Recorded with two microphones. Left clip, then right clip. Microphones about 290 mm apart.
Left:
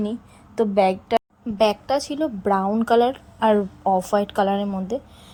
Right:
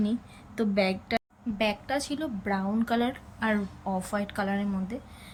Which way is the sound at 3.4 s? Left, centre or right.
Left.